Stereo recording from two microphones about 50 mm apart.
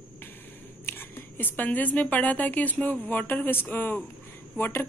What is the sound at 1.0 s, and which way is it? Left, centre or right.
A woman's voice, left.